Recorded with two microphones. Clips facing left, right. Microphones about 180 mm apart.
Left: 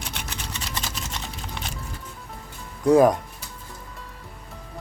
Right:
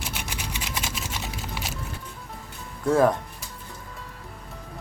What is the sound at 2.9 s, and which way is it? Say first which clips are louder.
Speech: left 4 dB; 15° left (ahead or behind).